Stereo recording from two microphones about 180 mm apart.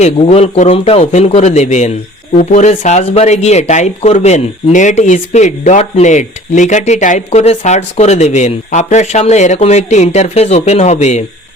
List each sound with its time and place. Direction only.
0.0 s speech: 40° left (ahead or behind)